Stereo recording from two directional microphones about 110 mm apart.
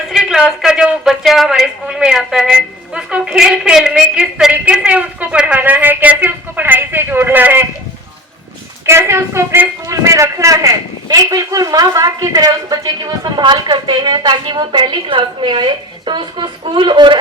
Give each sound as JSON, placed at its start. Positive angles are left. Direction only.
{"t": 0.1, "sound": "a woman's voice", "side_deg": 0}
{"t": 8.9, "sound": "speech", "side_deg": -25}